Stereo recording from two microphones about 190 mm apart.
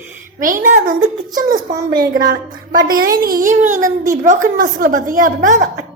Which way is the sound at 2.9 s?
50° right (ahead or behind).